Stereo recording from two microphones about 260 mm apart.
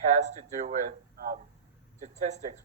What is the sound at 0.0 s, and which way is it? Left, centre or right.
A man's voice, right.